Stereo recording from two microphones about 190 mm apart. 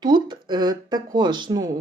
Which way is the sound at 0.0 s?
20° right (ahead or behind).